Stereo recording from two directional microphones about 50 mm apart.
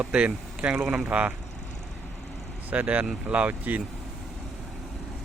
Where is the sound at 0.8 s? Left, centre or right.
Centre.